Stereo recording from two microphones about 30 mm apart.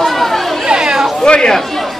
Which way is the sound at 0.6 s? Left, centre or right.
Right.